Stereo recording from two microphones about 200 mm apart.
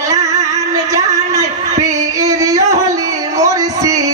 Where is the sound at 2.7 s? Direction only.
15° right (ahead or behind).